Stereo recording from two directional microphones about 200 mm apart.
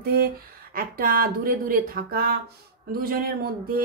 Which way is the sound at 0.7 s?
45° right (ahead or behind).